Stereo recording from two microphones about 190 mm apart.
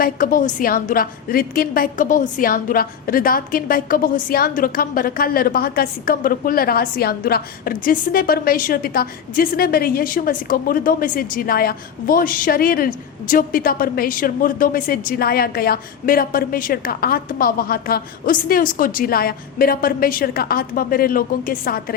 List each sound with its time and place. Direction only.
0.0 s a woman's voice: 45° left (ahead or behind)